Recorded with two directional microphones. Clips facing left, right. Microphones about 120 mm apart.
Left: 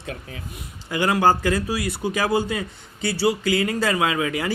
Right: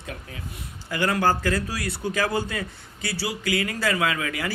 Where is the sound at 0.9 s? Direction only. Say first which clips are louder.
Left 4 dB; 15° left (ahead or behind).